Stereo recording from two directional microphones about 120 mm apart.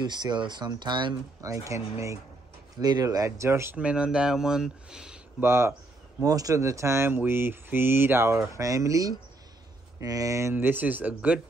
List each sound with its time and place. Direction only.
0.0 s speech: 35° right (ahead or behind)
1.4 s speech: 25° right (ahead or behind)
2.8 s speech: 30° right (ahead or behind)
3.7 s speech: 10° right (ahead or behind)
5.4 s speech: 20° right (ahead or behind)
10.5 s speech: 15° right (ahead or behind)